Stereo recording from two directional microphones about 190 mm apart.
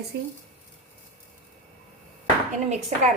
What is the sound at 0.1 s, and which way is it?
Speech, 60° right (ahead or behind).